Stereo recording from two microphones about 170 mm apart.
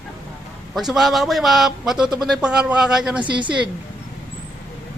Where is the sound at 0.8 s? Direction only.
Centre (ahead or behind).